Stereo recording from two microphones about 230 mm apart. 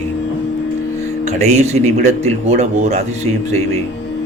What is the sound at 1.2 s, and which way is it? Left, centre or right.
Speech, right.